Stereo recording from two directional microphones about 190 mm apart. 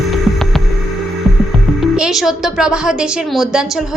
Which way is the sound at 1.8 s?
Centre (ahead or behind).